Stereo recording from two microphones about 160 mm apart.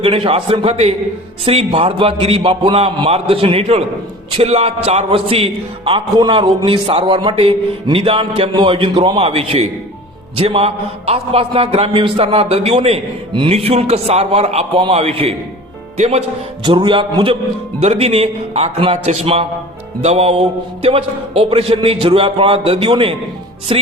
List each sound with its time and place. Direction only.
0.0 s a man's voice: 35° right (ahead or behind)
16.6 s a man's voice: 30° right (ahead or behind)